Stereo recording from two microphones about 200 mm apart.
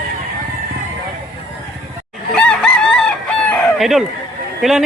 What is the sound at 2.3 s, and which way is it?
Chicken, 5° left (ahead or behind).